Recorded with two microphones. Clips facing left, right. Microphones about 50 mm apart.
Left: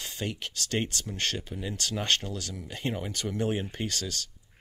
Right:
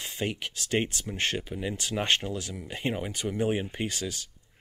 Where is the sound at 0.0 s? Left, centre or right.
Right.